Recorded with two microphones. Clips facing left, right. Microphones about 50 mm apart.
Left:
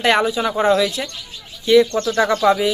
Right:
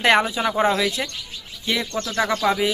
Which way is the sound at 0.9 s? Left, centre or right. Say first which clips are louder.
Right 1 dB; right.